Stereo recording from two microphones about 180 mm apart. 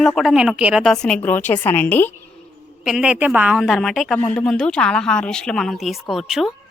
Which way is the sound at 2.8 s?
5° right (ahead or behind).